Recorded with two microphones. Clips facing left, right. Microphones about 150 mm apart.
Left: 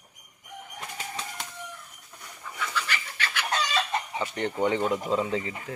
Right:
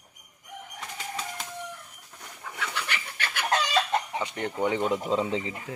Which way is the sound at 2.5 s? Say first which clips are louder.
Left 2 dB; 65° right (ahead or behind).